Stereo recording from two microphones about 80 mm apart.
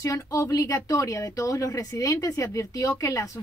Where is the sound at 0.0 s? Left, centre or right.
Left.